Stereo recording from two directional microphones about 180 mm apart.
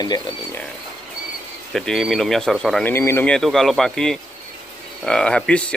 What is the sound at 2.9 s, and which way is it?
Speech, 15° left (ahead or behind).